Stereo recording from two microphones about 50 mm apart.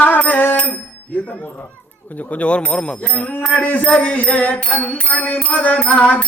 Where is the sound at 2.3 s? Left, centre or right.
Left.